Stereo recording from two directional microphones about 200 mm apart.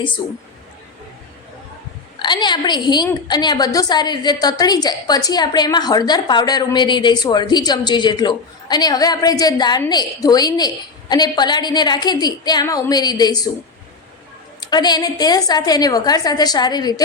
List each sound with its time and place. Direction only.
2.1 s a woman's voice: 20° left (ahead or behind)
14.6 s a woman's voice: 20° left (ahead or behind)